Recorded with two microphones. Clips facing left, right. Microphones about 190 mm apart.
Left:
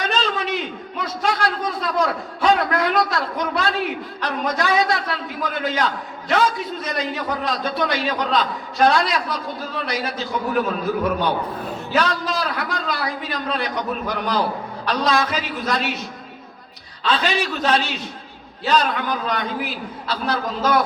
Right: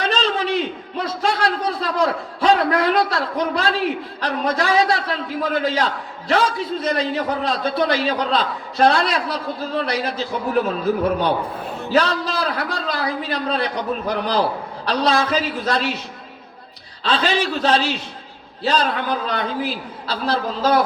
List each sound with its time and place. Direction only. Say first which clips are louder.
0.0 s a man's voice: right 2 dB; 30° right (ahead or behind)
11.9 s a man's voice: right 2 dB; 30° right (ahead or behind)
17.0 s a man's voice: right 1 dB; 30° right (ahead or behind)